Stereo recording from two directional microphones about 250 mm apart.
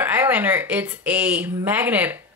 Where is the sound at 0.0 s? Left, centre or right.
Centre.